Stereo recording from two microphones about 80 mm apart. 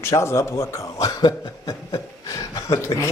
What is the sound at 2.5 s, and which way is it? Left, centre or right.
Speech, left.